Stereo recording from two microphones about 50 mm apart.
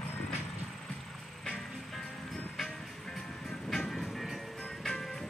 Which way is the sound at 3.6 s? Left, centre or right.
Centre.